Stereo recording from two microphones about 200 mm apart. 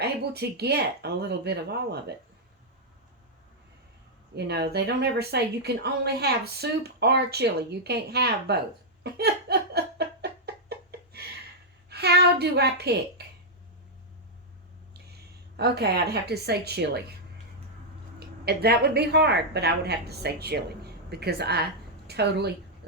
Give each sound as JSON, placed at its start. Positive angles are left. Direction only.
{"t": 0.0, "sound": "speech", "side_deg": -55}
{"t": 4.4, "sound": "speech", "side_deg": -55}
{"t": 9.1, "sound": "laughter", "side_deg": -55}
{"t": 11.9, "sound": "speech", "side_deg": -55}
{"t": 15.5, "sound": "speech", "side_deg": -55}
{"t": 18.2, "sound": "a woman's voice", "side_deg": -50}